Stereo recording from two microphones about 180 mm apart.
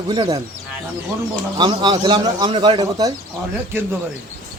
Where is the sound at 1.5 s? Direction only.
25° right (ahead or behind).